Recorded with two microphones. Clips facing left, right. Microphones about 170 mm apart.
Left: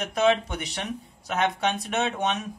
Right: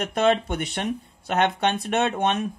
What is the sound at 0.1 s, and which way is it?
Speech, 55° right (ahead or behind).